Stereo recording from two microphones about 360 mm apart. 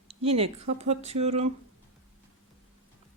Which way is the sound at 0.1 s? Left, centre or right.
Centre.